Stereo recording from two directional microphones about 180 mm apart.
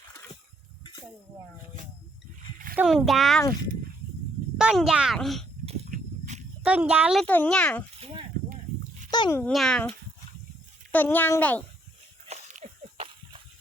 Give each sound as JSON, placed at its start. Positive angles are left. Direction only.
{"t": 2.7, "sound": "speech", "side_deg": 0}
{"t": 4.5, "sound": "a child's voice", "side_deg": -5}
{"t": 5.6, "sound": "a sound", "side_deg": -40}
{"t": 6.6, "sound": "speech", "side_deg": -5}
{"t": 7.3, "sound": "speech", "side_deg": 10}
{"t": 9.0, "sound": "a sound", "side_deg": 25}
{"t": 9.4, "sound": "speech", "side_deg": 0}
{"t": 10.9, "sound": "speech", "side_deg": 10}
{"t": 12.3, "sound": "a sound", "side_deg": -35}